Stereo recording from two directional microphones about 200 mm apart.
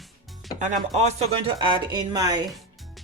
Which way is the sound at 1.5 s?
20° right (ahead or behind).